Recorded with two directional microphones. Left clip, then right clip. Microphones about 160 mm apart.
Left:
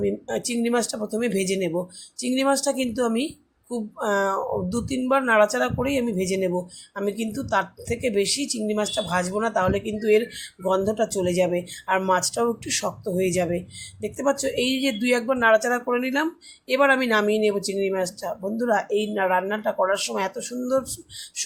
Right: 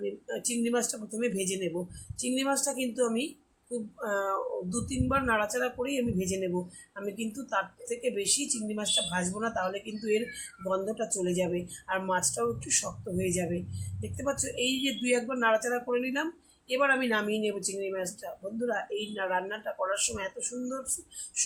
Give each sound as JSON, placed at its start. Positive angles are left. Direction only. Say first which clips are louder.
{"t": 0.0, "sound": "speech", "louder": "left 9 dB", "side_deg": 50}